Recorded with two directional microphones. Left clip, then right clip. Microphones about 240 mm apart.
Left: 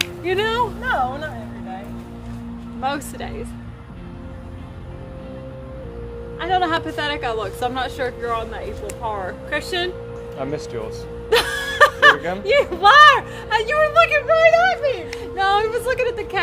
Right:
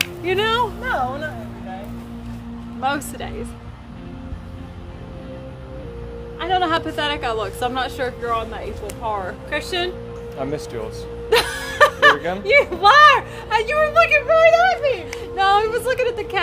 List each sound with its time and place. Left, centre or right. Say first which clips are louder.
0.0 s speech: right 1 dB; centre
0.8 s speech: left 1 dB; centre
2.8 s a woman's voice: right 2 dB; centre
6.4 s a woman's voice: even; centre
9.5 s music: even; centre
12.2 s speech: right 1 dB; centre
12.4 s speech: even; centre
15.1 s a woman's voice: right 3 dB; centre